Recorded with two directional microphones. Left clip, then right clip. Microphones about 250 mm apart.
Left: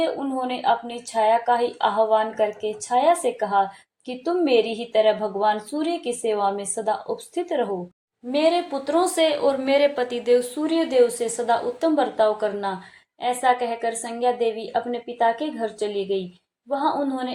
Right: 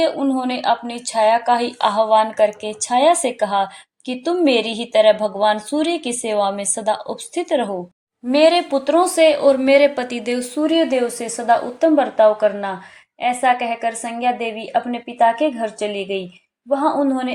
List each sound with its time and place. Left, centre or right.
0.0 s a woman's voice: right